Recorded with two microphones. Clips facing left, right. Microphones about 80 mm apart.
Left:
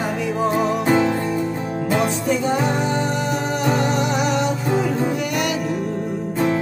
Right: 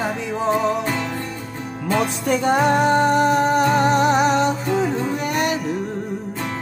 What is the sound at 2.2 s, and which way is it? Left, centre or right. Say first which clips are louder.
Music: right 2 dB; right.